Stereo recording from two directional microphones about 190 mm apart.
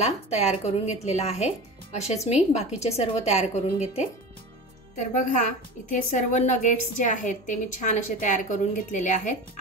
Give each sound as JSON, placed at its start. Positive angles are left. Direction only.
{"t": 0.4, "sound": "a woman's voice", "side_deg": 35}
{"t": 5.1, "sound": "a woman's voice", "side_deg": 40}